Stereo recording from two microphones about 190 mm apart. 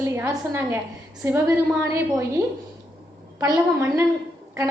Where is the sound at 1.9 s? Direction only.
15° right (ahead or behind).